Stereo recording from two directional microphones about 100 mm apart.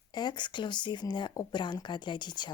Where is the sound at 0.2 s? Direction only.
50° left (ahead or behind).